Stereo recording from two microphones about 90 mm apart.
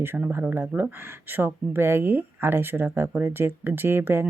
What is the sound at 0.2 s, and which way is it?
Speech, 20° right (ahead or behind).